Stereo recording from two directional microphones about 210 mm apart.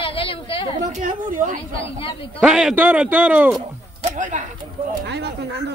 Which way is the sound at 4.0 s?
35° right (ahead or behind).